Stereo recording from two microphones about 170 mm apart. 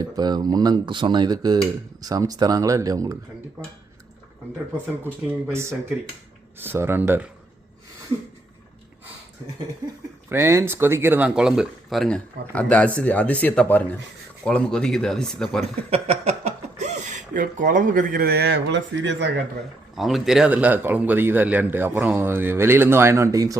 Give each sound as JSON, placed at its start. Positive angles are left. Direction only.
{"t": 0.0, "sound": "speech", "side_deg": -25}
{"t": 5.5, "sound": "speech", "side_deg": -15}
{"t": 10.2, "sound": "speech", "side_deg": -15}
{"t": 15.9, "sound": "speech", "side_deg": -40}
{"t": 20.0, "sound": "speech", "side_deg": 0}